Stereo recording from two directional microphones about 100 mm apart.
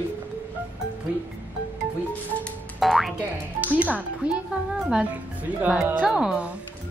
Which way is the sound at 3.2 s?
15° right (ahead or behind).